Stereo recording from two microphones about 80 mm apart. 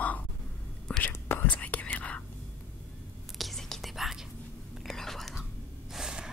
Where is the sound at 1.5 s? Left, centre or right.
Centre.